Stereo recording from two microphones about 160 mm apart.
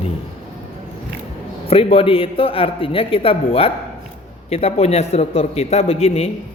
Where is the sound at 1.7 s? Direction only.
35° left (ahead or behind).